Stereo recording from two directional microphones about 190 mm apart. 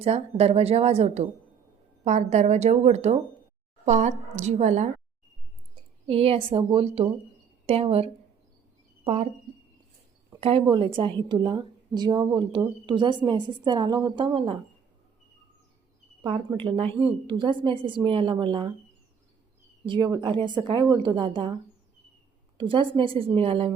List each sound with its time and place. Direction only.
0.0 s a woman's voice: 35° right (ahead or behind)
6.1 s a woman's voice: 30° right (ahead or behind)
10.4 s speech: 25° right (ahead or behind)
16.2 s speech: 25° right (ahead or behind)
19.8 s speech: 25° right (ahead or behind)
22.5 s speech: 25° right (ahead or behind)